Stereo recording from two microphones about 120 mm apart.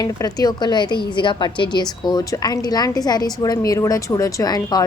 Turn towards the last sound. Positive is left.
turn(degrees=35)  # may be behind; listen again after turning